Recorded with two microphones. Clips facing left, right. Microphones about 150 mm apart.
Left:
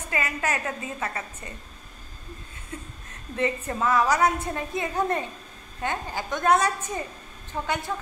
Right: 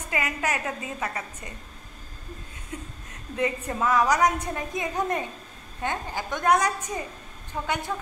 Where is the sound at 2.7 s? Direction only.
15° right (ahead or behind).